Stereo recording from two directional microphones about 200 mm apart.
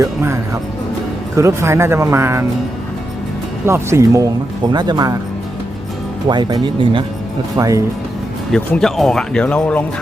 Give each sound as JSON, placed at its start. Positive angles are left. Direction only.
{"t": 0.0, "sound": "speech", "side_deg": -15}
{"t": 3.7, "sound": "speech", "side_deg": -15}
{"t": 6.2, "sound": "speech", "side_deg": -20}
{"t": 8.5, "sound": "speech", "side_deg": 5}